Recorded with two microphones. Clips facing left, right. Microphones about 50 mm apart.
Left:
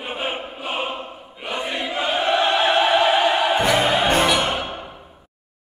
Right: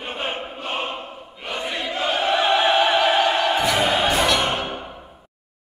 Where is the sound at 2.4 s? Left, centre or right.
Centre.